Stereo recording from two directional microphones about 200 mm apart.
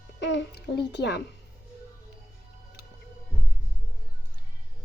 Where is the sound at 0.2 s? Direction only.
65° left (ahead or behind).